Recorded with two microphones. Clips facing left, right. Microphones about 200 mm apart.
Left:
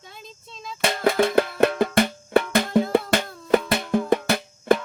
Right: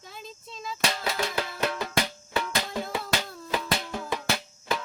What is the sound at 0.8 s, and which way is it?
Music, 55° left (ahead or behind).